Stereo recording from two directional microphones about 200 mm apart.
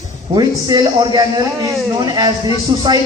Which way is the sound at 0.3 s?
20° right (ahead or behind).